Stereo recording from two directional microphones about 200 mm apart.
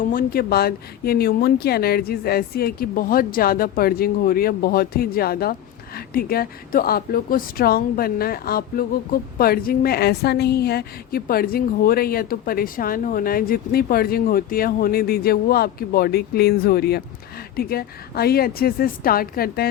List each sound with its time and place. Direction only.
0.0 s a woman's voice: 45° left (ahead or behind)